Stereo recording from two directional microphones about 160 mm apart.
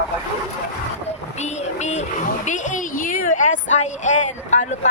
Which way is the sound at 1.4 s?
45° left (ahead or behind).